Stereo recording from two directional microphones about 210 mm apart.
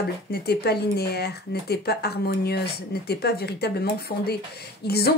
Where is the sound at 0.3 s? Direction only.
50° left (ahead or behind).